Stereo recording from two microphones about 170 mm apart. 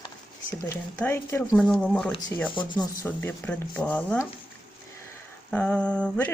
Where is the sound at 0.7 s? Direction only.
15° left (ahead or behind).